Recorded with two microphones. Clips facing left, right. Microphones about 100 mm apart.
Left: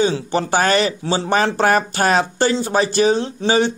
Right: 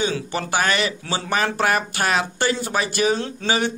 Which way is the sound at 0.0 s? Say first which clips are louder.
Left 6 dB; 30° left (ahead or behind).